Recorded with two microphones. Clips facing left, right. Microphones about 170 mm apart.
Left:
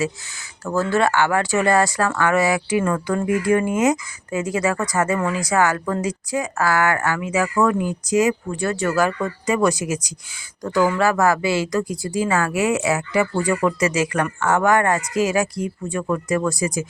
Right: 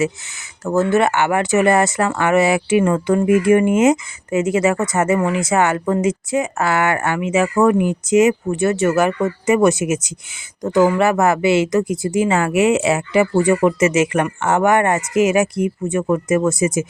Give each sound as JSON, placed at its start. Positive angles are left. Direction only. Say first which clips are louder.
{"t": 0.6, "sound": "speech", "louder": "right 4 dB", "side_deg": -20}